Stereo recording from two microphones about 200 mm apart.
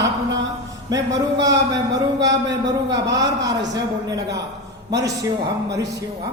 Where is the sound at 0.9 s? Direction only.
15° right (ahead or behind).